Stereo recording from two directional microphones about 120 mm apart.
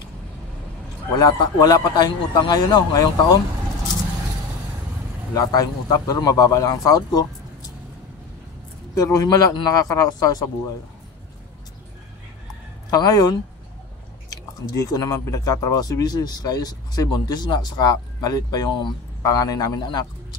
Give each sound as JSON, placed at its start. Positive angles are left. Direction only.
{"t": 1.2, "sound": "speech", "side_deg": 30}
{"t": 5.3, "sound": "speech", "side_deg": 30}
{"t": 8.9, "sound": "speech", "side_deg": 30}
{"t": 12.9, "sound": "speech", "side_deg": 30}
{"t": 19.2, "sound": "speech", "side_deg": 30}